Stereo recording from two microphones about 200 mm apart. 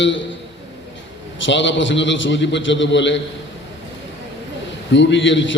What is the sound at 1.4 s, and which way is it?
A man's voice, 65° left (ahead or behind).